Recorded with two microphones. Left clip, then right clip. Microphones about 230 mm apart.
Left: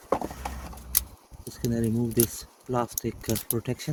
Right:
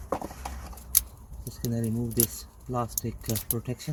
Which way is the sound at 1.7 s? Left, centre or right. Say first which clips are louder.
Left 4 dB; left.